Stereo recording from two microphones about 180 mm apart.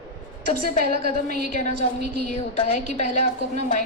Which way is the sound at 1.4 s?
40° left (ahead or behind).